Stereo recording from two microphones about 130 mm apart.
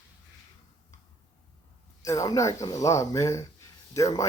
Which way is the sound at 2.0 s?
25° left (ahead or behind).